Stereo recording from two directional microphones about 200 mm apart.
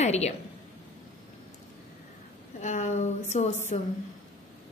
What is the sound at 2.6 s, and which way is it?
A woman's voice, 35° left (ahead or behind).